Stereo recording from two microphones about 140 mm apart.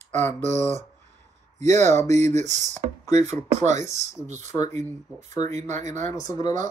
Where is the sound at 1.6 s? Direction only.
55° right (ahead or behind).